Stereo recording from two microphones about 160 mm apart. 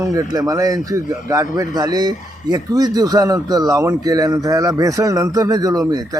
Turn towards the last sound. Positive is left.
turn(degrees=-25)  # may be behind; listen again after turning